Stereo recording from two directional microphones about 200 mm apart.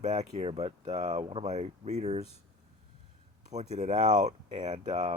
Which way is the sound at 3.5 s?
35° right (ahead or behind).